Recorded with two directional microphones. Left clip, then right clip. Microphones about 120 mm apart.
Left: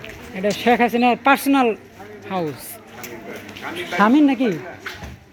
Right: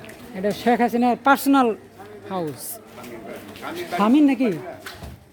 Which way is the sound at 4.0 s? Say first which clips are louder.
Left 3 dB; 10° left (ahead or behind).